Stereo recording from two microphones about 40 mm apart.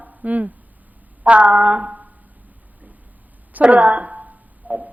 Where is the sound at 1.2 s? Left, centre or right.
Right.